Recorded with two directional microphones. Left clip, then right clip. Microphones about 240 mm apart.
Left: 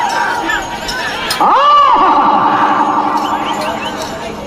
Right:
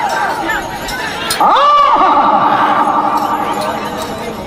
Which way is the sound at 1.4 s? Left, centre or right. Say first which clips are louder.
Left 1 dB; right.